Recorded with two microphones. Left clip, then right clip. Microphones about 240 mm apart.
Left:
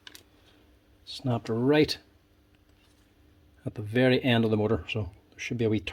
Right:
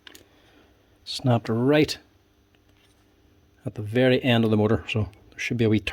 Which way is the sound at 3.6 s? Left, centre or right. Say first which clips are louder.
Right 3 dB; centre.